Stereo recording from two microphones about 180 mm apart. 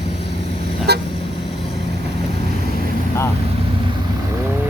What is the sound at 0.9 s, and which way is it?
Vehicle, 65° right (ahead or behind).